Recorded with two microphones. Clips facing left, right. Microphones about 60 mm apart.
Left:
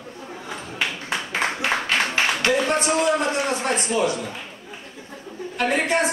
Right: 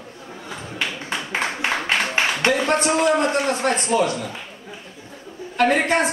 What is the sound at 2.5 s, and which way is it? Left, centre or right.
Speech, right.